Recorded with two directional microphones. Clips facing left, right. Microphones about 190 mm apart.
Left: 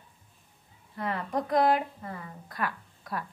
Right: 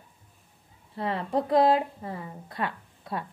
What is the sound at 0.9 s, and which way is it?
Speech, 25° right (ahead or behind).